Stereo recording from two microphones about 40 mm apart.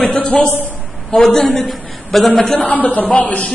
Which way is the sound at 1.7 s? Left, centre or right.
Centre.